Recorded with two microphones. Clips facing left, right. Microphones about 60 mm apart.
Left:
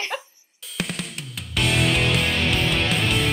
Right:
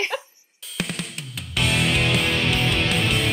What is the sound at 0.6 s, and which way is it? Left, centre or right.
Drum kit, centre.